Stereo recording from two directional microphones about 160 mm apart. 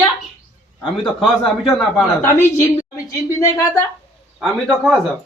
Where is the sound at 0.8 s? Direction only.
5° left (ahead or behind).